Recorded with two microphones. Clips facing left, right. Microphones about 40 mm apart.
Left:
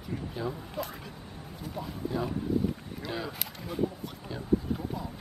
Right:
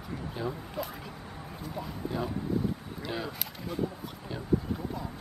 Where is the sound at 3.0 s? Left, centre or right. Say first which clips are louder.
Left 1 dB; centre.